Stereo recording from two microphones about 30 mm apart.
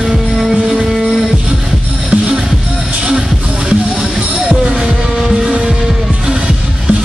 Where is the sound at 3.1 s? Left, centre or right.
Right.